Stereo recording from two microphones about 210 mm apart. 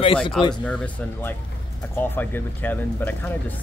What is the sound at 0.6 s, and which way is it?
Speech, 5° left (ahead or behind).